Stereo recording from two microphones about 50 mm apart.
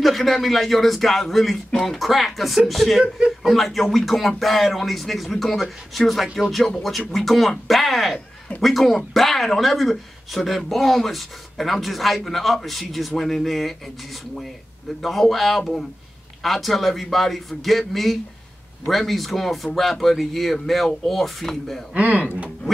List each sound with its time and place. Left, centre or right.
0.0 s speech: centre
3.0 s speech: centre
3.4 s speech: centre
15.0 s speech: centre
21.9 s speech: right